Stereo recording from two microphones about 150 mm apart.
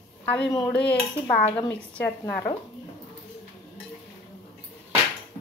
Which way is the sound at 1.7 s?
10° left (ahead or behind).